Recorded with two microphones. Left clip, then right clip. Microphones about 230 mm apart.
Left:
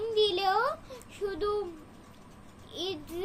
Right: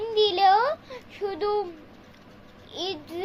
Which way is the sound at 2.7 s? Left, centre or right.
Left.